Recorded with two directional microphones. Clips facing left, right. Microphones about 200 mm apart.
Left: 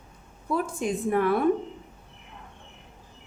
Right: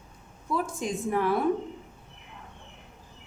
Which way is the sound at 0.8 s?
60° left (ahead or behind).